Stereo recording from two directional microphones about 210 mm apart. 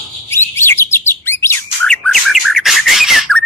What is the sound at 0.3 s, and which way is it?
Bird, 10° left (ahead or behind).